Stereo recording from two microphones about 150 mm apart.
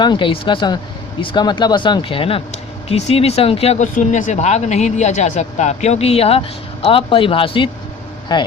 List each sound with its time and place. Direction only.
0.0 s speech: 30° left (ahead or behind)